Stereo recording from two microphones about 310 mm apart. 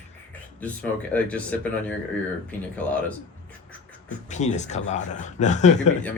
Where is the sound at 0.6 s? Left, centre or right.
Centre.